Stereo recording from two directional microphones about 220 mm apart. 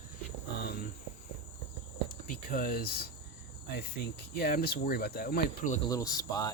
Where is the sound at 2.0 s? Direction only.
40° left (ahead or behind).